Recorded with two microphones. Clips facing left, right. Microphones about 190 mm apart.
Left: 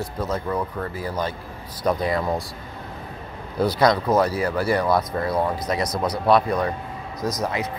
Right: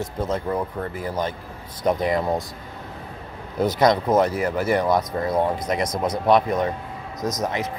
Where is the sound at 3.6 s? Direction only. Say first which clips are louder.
Even; 20° right (ahead or behind).